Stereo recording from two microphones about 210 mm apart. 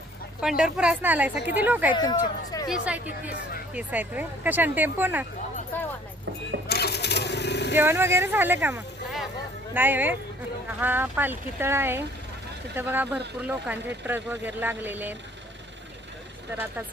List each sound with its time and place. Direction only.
0.4 s speech: 5° right (ahead or behind)
2.0 s speech: 20° left (ahead or behind)
2.6 s speech: 5° right (ahead or behind)
6.7 s a sound: 50° left (ahead or behind)
7.7 s speech: 10° right (ahead or behind)